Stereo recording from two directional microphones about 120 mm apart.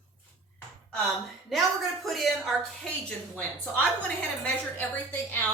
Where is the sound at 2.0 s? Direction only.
Centre (ahead or behind).